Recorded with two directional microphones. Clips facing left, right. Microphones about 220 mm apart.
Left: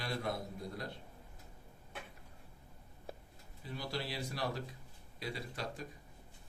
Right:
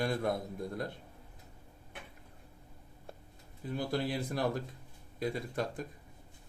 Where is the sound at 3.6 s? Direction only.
50° right (ahead or behind).